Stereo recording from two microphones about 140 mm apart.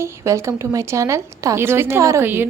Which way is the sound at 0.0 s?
20° right (ahead or behind).